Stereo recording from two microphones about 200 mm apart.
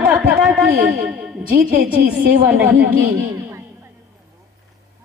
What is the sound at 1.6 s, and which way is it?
Speech, 50° right (ahead or behind).